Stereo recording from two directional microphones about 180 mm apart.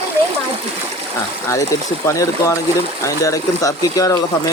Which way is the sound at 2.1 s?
15° left (ahead or behind).